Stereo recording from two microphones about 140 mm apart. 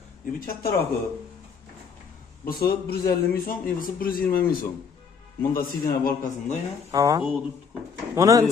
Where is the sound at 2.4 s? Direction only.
90° left.